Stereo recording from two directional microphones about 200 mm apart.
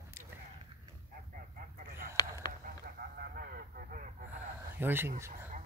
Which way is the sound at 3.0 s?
50° right (ahead or behind).